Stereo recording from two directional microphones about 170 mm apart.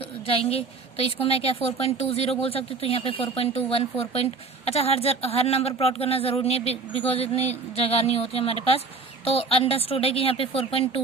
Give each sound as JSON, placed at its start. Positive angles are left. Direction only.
{"t": 0.3, "sound": "speech", "side_deg": 35}